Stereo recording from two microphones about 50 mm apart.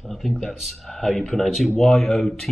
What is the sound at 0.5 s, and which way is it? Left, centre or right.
Speech, centre.